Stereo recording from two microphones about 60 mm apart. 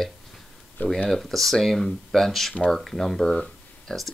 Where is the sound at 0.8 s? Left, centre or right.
Left.